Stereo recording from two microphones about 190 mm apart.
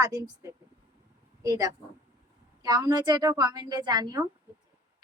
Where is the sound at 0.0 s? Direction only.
15° right (ahead or behind).